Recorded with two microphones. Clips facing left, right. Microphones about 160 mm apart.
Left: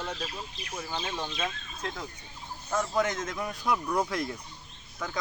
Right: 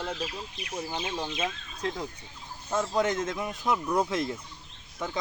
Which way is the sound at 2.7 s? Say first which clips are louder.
Right 2 dB; 25° right (ahead or behind).